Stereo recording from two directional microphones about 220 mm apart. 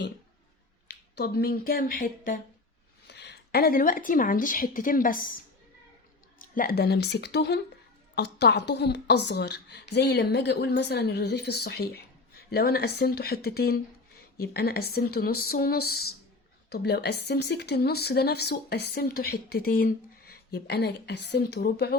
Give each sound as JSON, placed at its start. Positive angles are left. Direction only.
{"t": 0.9, "sound": "speech", "side_deg": 45}
{"t": 3.1, "sound": "speech", "side_deg": 50}
{"t": 6.4, "sound": "a woman's voice", "side_deg": 40}